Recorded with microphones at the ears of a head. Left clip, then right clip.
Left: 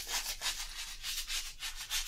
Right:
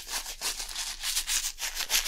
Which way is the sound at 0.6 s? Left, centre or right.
Right.